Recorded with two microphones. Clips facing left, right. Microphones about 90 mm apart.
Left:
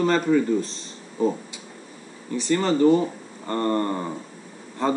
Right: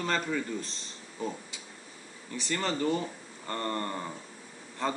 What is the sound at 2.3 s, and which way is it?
Speech, 5° left (ahead or behind).